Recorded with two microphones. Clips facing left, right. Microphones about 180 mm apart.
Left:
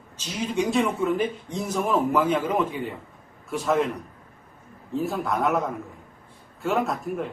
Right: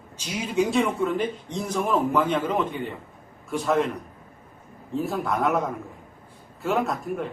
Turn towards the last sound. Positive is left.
turn(degrees=0)  # may be behind; listen again after turning